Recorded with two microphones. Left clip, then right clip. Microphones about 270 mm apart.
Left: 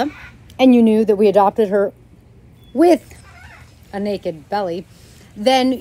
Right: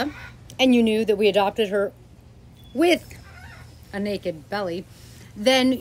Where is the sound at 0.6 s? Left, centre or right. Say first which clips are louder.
Left 6 dB; centre.